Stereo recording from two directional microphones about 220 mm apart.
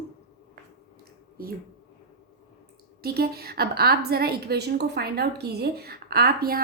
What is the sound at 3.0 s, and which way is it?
A woman's voice, 45° right (ahead or behind).